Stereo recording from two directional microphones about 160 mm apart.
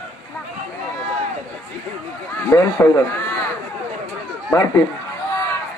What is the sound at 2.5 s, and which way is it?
Speech, 15° left (ahead or behind).